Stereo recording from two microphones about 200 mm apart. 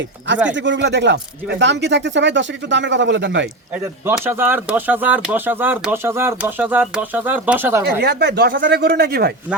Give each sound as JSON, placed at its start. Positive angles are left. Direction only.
{"t": 0.5, "sound": "speech", "side_deg": -65}
{"t": 4.0, "sound": "speech", "side_deg": -10}
{"t": 7.9, "sound": "speech", "side_deg": -55}